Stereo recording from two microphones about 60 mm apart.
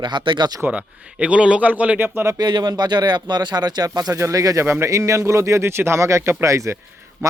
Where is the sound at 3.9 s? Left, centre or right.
Right.